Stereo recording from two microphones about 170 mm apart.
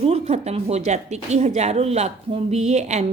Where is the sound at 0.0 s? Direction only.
40° right (ahead or behind).